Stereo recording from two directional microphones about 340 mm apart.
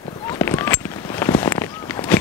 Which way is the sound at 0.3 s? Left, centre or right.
Centre.